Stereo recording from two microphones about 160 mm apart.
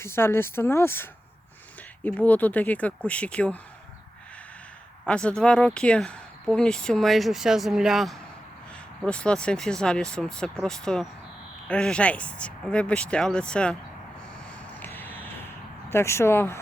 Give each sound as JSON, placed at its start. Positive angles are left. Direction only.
{"t": 0.0, "sound": "speech", "side_deg": 15}
{"t": 2.0, "sound": "speech", "side_deg": 10}
{"t": 5.0, "sound": "speech", "side_deg": 5}
{"t": 14.8, "sound": "vehicle", "side_deg": 10}
{"t": 15.9, "sound": "speech", "side_deg": 15}